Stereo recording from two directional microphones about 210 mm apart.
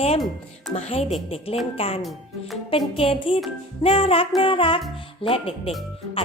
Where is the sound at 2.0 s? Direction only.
Centre (ahead or behind).